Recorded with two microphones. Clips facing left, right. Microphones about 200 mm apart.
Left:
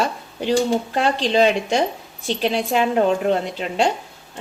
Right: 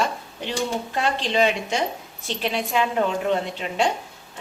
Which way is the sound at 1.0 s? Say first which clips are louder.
Left 4 dB; 35° left (ahead or behind).